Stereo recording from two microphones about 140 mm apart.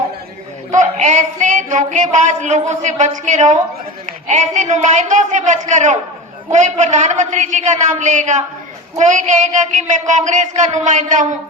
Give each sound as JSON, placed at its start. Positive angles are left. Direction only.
{"t": 0.7, "sound": "speech", "side_deg": -60}